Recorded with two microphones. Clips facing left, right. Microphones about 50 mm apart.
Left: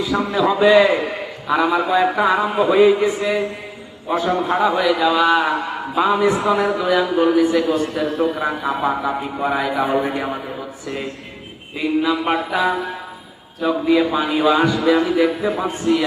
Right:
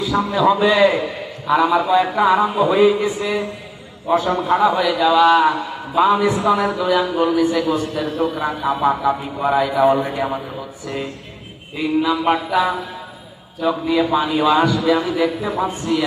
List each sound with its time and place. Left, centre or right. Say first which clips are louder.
0.0 s a man's voice: right 2 dB; centre
11.8 s a man's voice: right 1 dB; centre
13.6 s a man's voice: left 1 dB; centre